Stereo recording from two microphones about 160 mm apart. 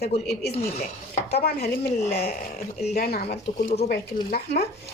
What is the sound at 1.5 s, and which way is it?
Speech, 80° left.